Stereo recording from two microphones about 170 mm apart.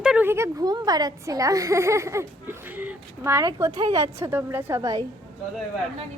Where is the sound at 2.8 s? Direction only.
15° right (ahead or behind).